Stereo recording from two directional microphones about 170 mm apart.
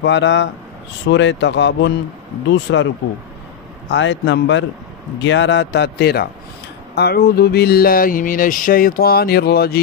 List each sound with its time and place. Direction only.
0.0 s speech: 90° left
3.9 s speech: 90° left; by 6.2 s 70° left (ahead or behind)
7.0 s a sound: 65° left (ahead or behind)